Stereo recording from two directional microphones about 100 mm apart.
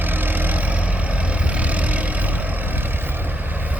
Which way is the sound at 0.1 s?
20° right (ahead or behind).